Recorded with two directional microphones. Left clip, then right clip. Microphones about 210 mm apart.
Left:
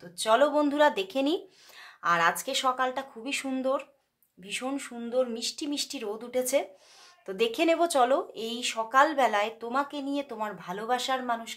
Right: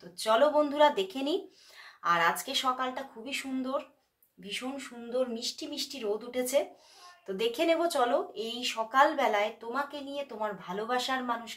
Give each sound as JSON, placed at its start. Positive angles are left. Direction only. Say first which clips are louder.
{"t": 0.2, "sound": "speech", "louder": "left 2 dB", "side_deg": 40}